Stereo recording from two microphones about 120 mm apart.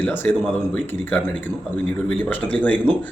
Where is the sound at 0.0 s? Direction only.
15° left (ahead or behind).